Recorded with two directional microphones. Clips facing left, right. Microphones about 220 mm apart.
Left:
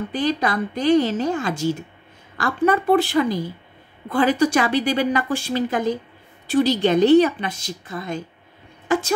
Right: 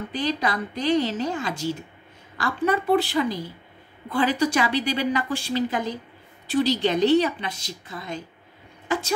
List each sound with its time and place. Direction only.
0.1 s a woman's voice: 50° left (ahead or behind)